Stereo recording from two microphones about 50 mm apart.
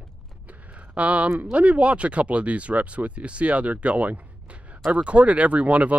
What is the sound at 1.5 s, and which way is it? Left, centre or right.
Speech, right.